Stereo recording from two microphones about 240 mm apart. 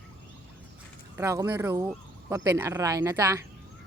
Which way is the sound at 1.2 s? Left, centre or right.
Centre.